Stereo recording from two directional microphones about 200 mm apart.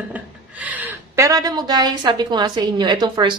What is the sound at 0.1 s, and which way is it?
Speech, 10° right (ahead or behind).